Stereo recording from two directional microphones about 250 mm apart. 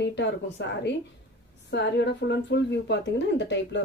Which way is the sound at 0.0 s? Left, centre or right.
Left.